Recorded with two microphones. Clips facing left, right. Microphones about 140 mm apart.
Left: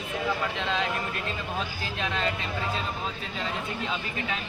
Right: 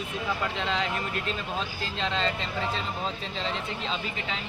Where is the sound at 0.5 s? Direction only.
15° right (ahead or behind).